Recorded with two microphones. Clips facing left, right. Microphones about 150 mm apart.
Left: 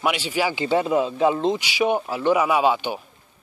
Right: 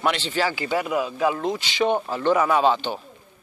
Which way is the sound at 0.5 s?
25° left (ahead or behind).